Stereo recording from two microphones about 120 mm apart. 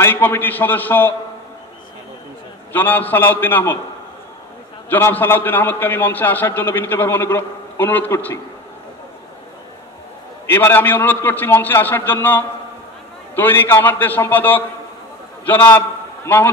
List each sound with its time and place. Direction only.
0.0 s a man's voice: 15° left (ahead or behind)
2.7 s a man's voice: 15° left (ahead or behind)
4.8 s a man's voice: 15° left (ahead or behind)
10.4 s a man's voice: 20° left (ahead or behind)